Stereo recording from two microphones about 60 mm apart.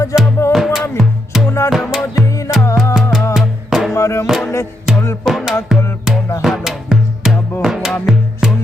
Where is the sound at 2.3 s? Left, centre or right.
Left.